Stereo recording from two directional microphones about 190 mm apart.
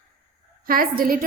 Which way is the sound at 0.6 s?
50° right (ahead or behind).